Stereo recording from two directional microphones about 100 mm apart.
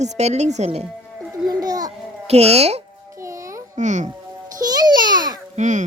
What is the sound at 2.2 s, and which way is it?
Speech, 90° right.